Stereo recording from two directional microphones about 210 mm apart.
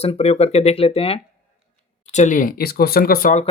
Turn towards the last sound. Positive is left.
turn(degrees=40)  # may be behind; listen again after turning